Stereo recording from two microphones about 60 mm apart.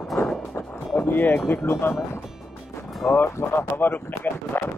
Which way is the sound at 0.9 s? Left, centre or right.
Left.